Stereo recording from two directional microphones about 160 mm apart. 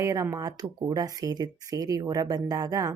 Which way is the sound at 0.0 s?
20° right (ahead or behind).